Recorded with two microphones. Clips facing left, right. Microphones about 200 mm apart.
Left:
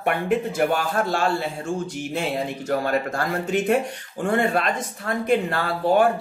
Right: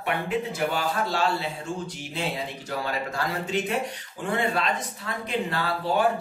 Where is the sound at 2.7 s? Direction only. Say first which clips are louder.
Left 7 dB; 50° left (ahead or behind).